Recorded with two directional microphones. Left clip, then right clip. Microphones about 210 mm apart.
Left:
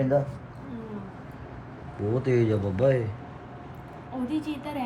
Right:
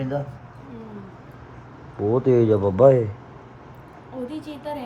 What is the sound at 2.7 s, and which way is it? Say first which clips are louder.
Speech: right 9 dB; 90° right.